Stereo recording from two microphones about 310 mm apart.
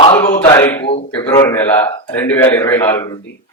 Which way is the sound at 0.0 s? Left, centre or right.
Centre.